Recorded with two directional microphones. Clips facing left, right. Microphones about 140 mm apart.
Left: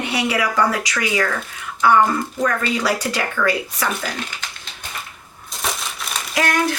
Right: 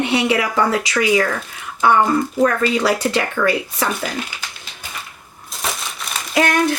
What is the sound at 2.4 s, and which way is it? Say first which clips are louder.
Speech: right 2 dB; 25° right (ahead or behind).